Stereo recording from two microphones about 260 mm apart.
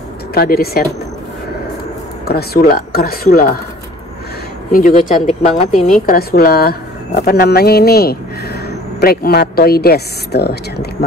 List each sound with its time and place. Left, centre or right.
0.3 s speech: left
2.2 s speech: left
4.7 s speech: left